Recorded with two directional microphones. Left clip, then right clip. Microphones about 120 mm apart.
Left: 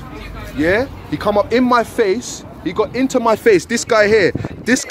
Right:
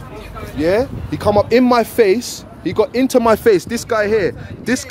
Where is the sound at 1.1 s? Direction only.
50° right (ahead or behind); by 3.4 s 70° right (ahead or behind).